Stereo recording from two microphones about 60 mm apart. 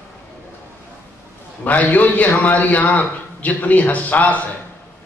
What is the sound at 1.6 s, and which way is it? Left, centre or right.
A man's voice, left.